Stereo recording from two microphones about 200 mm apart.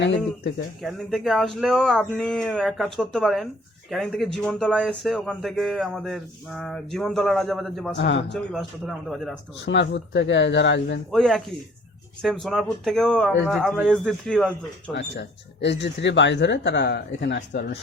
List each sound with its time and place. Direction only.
0.8 s speech: centre (ahead or behind)
7.9 s speech: 60° left (ahead or behind)
8.3 s speech: centre (ahead or behind)
9.6 s speech: 60° left (ahead or behind)
11.1 s speech: centre (ahead or behind)
14.9 s speech: 60° left (ahead or behind)